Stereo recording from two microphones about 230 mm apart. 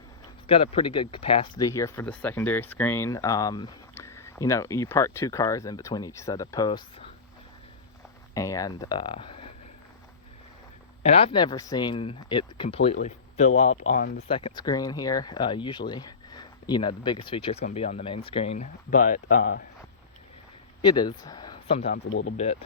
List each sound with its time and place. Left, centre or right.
0.4 s speech: left
8.3 s speech: centre
11.0 s speech: left
13.9 s speech: left
14.3 s speech: left
20.8 s speech: centre
21.9 s speech: left